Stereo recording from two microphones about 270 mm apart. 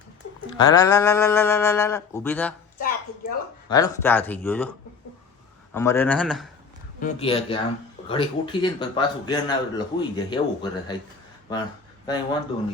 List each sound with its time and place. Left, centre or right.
0.5 s speech: centre
2.7 s a sound: left
3.7 s speech: centre
5.7 s speech: centre
7.0 s a man's voice: left
12.0 s speech: centre